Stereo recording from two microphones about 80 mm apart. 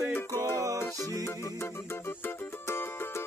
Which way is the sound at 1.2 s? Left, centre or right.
Left.